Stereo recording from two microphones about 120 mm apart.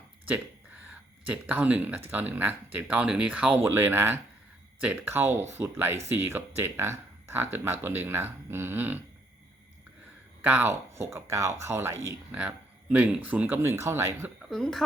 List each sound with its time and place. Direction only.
0.9 s speech: 15° right (ahead or behind)
10.4 s speech: 15° right (ahead or behind)
12.0 s speech: 10° right (ahead or behind)
14.5 s speech: centre (ahead or behind)